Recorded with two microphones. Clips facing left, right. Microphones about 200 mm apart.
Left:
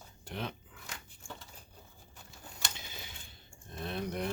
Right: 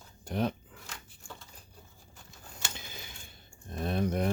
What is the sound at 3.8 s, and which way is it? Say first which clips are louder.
Speech: right 6 dB; 50° right (ahead or behind).